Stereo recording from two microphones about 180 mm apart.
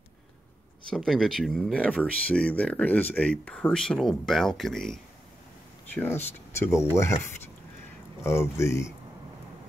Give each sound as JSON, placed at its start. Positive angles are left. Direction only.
{"t": 0.8, "sound": "speech", "side_deg": 0}
{"t": 5.9, "sound": "speech", "side_deg": 15}
{"t": 8.2, "sound": "speech", "side_deg": 15}